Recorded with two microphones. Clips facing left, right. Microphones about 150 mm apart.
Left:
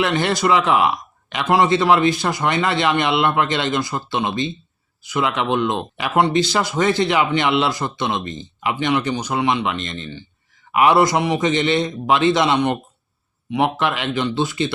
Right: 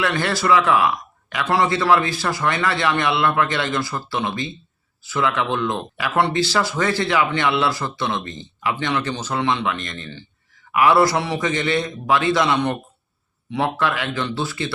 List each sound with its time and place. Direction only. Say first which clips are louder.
0.0 s speech: left 3 dB; 20° left (ahead or behind)